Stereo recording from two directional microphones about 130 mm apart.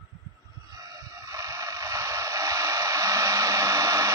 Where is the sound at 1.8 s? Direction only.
25° right (ahead or behind).